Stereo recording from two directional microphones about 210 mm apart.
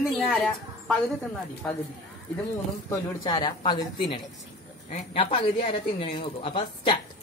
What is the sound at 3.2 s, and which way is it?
A woman's voice, 20° left (ahead or behind).